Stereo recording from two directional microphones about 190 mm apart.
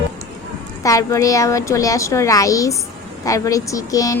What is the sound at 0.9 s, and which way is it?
Speech, 15° left (ahead or behind).